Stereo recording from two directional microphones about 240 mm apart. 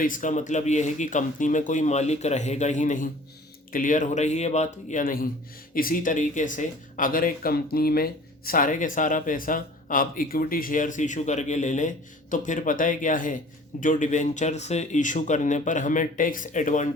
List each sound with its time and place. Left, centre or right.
0.0 s speech: left